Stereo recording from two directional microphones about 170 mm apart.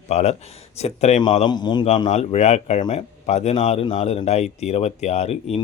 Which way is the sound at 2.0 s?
45° left (ahead or behind).